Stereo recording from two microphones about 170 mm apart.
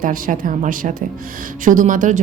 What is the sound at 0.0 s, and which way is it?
Speech, 55° right (ahead or behind).